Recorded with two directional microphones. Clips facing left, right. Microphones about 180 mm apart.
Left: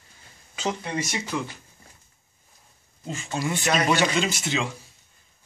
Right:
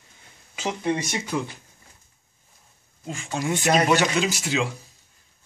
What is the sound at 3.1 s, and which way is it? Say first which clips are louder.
A man's voice: right 1 dB; 10° right (ahead or behind).